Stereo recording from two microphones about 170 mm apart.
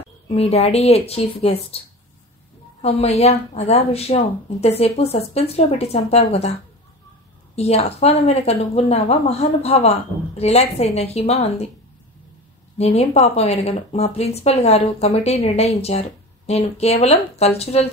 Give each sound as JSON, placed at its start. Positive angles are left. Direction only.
{"t": 0.3, "sound": "speech", "side_deg": 35}
{"t": 2.8, "sound": "speech", "side_deg": 40}
{"t": 7.5, "sound": "speech", "side_deg": 40}
{"t": 12.7, "sound": "speech", "side_deg": 40}